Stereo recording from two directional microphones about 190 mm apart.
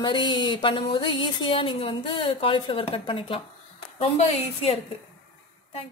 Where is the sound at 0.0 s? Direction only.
25° left (ahead or behind).